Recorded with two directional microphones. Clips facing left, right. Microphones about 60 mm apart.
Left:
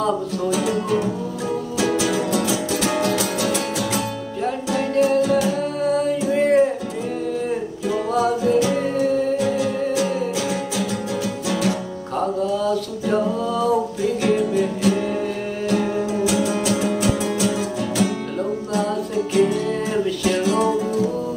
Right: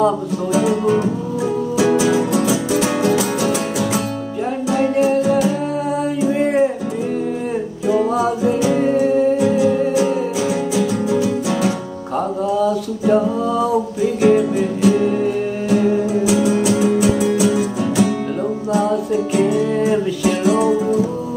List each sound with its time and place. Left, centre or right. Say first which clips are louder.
0.5 s music: right 5 dB; right
4.7 s music: right 2 dB; centre
7.8 s music: right 4 dB; centre
12.5 s a sound: right 4 dB; centre
14.2 s music: right 6 dB; centre
19.3 s music: right 1 dB; centre